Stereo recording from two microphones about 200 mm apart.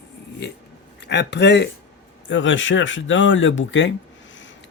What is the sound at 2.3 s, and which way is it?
Speech, 70° left (ahead or behind).